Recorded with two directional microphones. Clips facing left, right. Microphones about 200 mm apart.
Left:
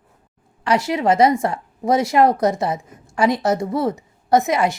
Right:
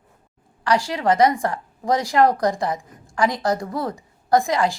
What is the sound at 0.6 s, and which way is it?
A woman's voice, 20° left (ahead or behind).